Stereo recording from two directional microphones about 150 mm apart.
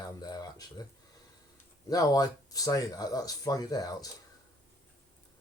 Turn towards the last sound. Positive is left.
turn(degrees=25)  # may be behind; listen again after turning